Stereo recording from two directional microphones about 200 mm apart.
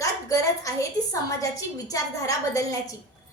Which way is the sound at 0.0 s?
15° left (ahead or behind).